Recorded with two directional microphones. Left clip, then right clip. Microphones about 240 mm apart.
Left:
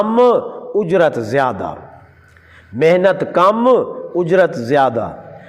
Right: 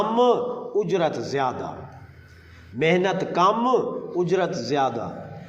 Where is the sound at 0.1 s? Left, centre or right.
Left.